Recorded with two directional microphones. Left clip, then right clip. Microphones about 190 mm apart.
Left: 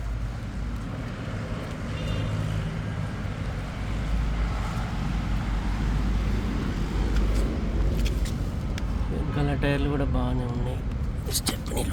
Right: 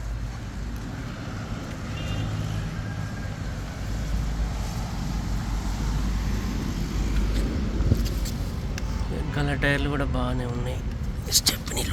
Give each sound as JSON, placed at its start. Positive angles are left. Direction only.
{"t": 9.3, "sound": "speech", "side_deg": 0}
{"t": 11.3, "sound": "vehicle", "side_deg": 20}